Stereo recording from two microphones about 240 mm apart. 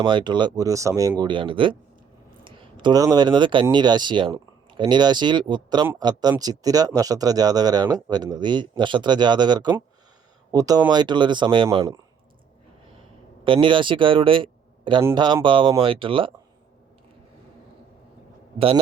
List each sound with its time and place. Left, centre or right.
0.0 s speech: centre
13.4 s speech: right